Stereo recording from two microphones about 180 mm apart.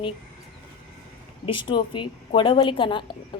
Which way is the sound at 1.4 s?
30° left (ahead or behind).